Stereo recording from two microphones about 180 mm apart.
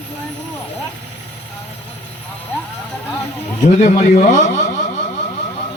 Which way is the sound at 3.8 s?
40° left (ahead or behind).